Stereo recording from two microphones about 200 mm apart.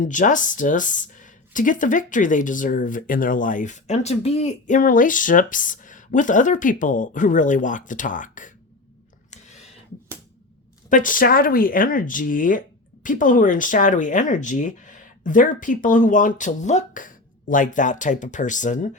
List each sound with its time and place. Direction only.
0.0 s speech: 40° left (ahead or behind)
9.3 s a sound: 35° left (ahead or behind)
10.8 s speech: 40° left (ahead or behind)